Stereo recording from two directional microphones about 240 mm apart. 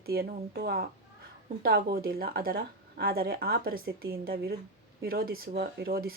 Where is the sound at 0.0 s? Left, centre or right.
Right.